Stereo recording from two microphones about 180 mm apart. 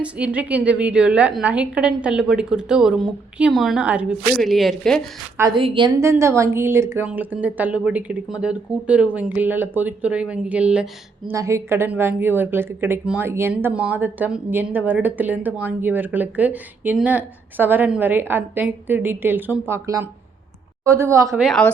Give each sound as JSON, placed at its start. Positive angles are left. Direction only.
{"t": 0.0, "sound": "a woman's voice", "side_deg": -5}
{"t": 5.5, "sound": "a woman's voice", "side_deg": -30}
{"t": 6.0, "sound": "a woman's voice", "side_deg": -15}
{"t": 21.4, "sound": "a woman's voice", "side_deg": 5}